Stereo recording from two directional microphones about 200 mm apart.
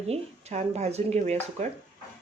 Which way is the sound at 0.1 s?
30° right (ahead or behind).